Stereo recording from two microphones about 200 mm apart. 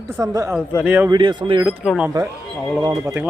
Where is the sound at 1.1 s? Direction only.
20° right (ahead or behind).